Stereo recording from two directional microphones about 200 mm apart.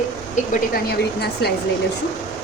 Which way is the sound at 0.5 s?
50° left (ahead or behind).